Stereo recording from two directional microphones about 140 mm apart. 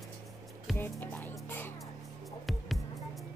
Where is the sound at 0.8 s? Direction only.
15° left (ahead or behind).